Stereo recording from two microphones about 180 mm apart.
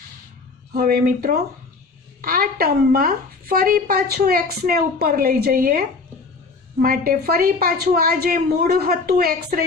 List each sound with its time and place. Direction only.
0.7 s speech: 55° right (ahead or behind)
6.8 s speech: 55° right (ahead or behind)